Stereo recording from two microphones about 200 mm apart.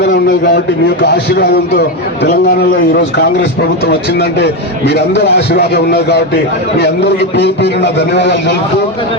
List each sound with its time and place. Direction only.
0.0 s a man's voice: 60° left (ahead or behind)
4.9 s a man's voice: 60° left (ahead or behind)